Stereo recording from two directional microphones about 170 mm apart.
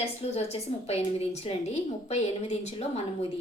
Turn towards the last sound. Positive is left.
turn(degrees=35)  # may be behind; listen again after turning